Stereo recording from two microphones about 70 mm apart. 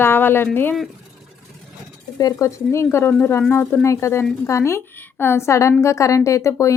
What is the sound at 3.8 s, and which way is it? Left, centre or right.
A woman's voice, left.